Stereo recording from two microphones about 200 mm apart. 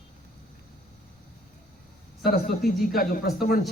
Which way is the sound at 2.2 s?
50° left (ahead or behind).